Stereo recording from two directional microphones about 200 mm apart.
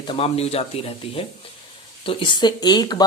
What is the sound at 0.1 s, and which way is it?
Speech, 30° left (ahead or behind).